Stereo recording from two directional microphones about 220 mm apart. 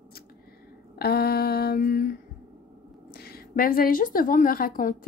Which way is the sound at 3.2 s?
45° left (ahead or behind).